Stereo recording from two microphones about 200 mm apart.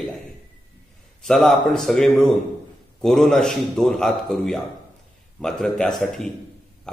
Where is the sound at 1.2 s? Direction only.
Centre (ahead or behind).